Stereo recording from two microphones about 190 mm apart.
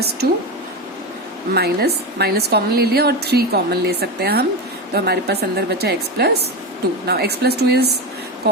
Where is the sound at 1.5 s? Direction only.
55° right (ahead or behind).